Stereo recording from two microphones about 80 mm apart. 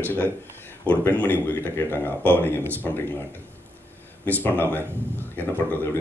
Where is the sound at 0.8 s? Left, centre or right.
Centre.